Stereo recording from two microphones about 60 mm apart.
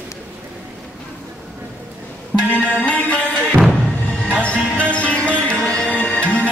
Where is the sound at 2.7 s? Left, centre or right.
Centre.